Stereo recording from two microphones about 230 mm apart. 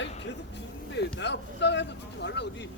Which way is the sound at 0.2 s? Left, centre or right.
Left.